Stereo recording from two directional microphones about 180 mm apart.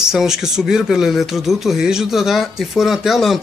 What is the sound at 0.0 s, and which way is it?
Speech, centre (ahead or behind).